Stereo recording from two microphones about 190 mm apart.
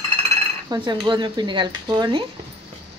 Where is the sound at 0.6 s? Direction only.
25° right (ahead or behind).